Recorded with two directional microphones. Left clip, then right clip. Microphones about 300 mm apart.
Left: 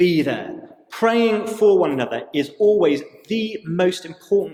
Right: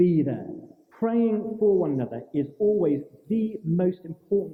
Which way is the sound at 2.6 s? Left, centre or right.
Left.